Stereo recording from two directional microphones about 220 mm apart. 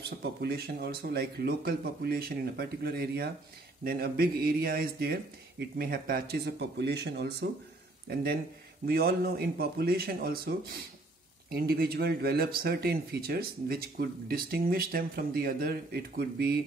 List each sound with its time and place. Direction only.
0.0 s speech: 45° right (ahead or behind)